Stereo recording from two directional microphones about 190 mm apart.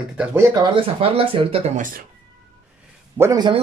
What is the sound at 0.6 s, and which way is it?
Speech, 30° right (ahead or behind).